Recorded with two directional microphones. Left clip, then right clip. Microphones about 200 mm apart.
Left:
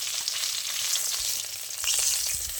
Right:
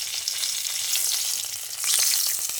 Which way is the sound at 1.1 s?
Centre (ahead or behind).